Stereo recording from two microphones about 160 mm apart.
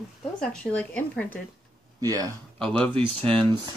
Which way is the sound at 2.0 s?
25° right (ahead or behind).